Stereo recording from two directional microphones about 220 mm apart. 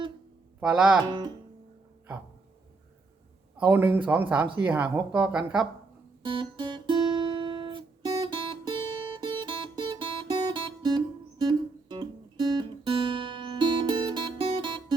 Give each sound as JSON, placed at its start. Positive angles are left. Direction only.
{"t": 0.6, "sound": "speech", "side_deg": -5}
{"t": 3.7, "sound": "speech", "side_deg": -10}
{"t": 6.2, "sound": "guitar", "side_deg": -20}